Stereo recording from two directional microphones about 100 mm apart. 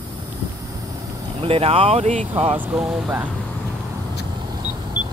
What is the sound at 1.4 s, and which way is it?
Speech, 80° right.